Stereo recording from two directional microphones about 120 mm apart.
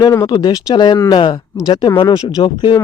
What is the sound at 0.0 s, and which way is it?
Speech, 30° left (ahead or behind).